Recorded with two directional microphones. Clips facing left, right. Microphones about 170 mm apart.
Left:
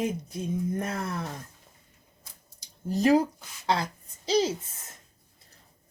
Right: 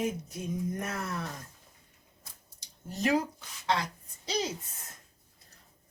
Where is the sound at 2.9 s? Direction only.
35° left (ahead or behind).